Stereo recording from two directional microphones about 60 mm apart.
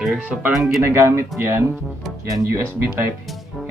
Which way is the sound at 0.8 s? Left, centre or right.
Right.